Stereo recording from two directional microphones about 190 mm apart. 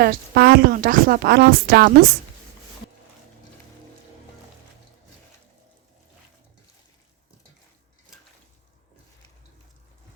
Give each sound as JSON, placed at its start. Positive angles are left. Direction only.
{"t": 0.0, "sound": "speech", "side_deg": -55}